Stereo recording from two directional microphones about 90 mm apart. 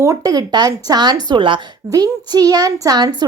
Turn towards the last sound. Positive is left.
turn(degrees=-50)  # may be behind; listen again after turning